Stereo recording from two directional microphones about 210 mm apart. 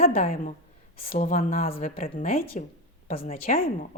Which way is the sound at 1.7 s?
25° left (ahead or behind).